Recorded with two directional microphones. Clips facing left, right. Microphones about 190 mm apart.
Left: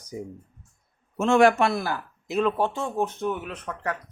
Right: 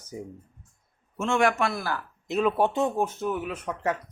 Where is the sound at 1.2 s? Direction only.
35° left (ahead or behind).